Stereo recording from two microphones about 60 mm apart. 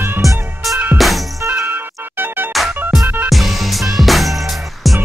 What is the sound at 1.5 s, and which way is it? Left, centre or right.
Music, right.